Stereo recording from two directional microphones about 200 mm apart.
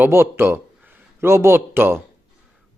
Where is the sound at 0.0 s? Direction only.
10° right (ahead or behind).